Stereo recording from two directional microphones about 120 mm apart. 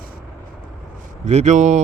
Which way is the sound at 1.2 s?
70° right (ahead or behind).